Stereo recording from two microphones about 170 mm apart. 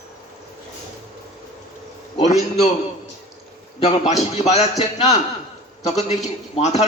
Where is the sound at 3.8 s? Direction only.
40° left (ahead or behind).